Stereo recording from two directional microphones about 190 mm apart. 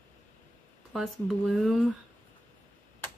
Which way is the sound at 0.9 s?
Centre (ahead or behind).